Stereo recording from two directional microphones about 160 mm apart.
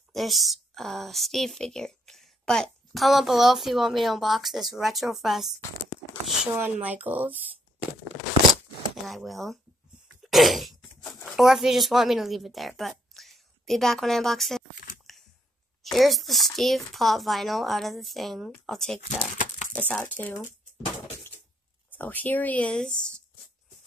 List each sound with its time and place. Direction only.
0.1 s a woman's voice: centre (ahead or behind)
6.6 s speech: 10° right (ahead or behind)
9.0 s a woman's voice: centre (ahead or behind)
10.2 s cough: centre (ahead or behind)
11.2 s a woman's voice: centre (ahead or behind)
15.1 s a sound: centre (ahead or behind)
15.8 s a woman's voice: centre (ahead or behind)
19.0 s crumpling: 45° left (ahead or behind)
19.7 s speech: 5° left (ahead or behind)
21.9 s speech: 10° left (ahead or behind)